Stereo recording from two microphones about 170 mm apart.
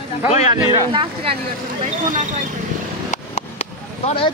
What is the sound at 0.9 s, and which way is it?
Speech, 30° right (ahead or behind).